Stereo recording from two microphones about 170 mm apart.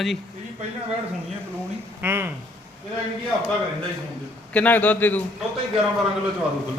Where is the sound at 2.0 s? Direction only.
15° right (ahead or behind).